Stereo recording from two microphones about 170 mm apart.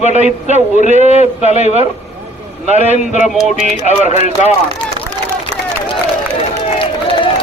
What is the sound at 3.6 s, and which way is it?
Speech, 40° left (ahead or behind).